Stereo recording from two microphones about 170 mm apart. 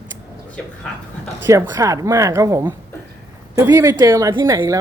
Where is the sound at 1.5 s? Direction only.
20° right (ahead or behind).